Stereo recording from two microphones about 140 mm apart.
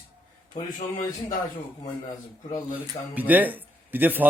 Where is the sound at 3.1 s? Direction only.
10° right (ahead or behind).